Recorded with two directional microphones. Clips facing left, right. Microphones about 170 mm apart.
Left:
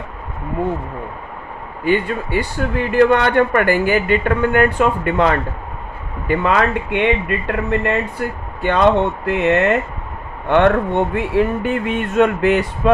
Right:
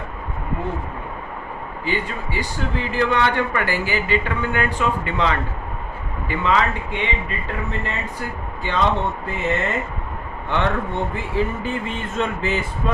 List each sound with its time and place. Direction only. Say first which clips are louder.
1.8 s a man's voice: left 8 dB; 55° left (ahead or behind)